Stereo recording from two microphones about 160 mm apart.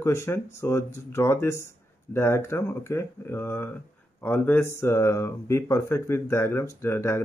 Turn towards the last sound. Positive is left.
turn(degrees=15)  # may be behind; listen again after turning